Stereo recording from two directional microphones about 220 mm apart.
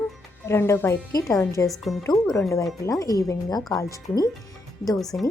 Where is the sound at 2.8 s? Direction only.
15° left (ahead or behind).